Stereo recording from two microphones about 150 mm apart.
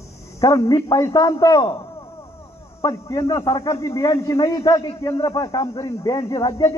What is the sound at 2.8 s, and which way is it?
A man's voice, 25° left (ahead or behind).